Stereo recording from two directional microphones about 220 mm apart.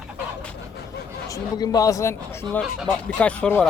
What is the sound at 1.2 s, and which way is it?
Speech, 15° left (ahead or behind).